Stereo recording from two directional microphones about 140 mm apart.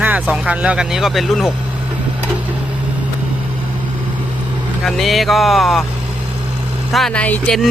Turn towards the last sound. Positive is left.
turn(degrees=10)  # may be behind; listen again after turning